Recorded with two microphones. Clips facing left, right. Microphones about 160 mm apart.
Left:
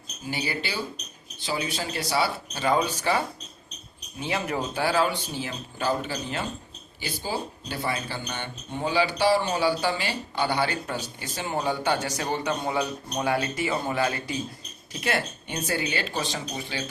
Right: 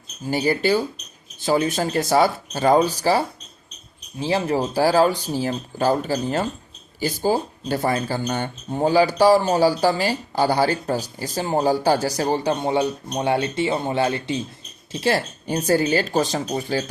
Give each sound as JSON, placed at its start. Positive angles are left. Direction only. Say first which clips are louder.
{"t": 0.3, "sound": "speech", "louder": "right 11 dB", "side_deg": -45}